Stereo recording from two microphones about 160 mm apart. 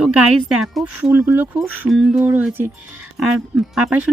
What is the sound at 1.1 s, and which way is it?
Speech, 15° right (ahead or behind).